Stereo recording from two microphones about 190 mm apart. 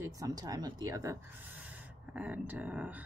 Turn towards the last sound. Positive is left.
turn(degrees=-10)  # may be behind; listen again after turning